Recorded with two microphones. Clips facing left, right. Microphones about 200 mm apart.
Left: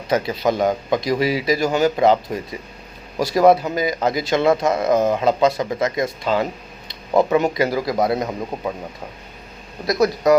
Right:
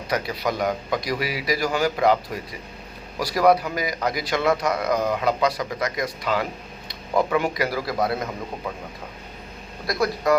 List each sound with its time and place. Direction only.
0.1 s a man's voice: 25° left (ahead or behind)
9.8 s a man's voice: 20° left (ahead or behind)